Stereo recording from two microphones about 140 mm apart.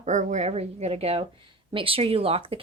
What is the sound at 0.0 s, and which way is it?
A woman's voice, 60° right (ahead or behind).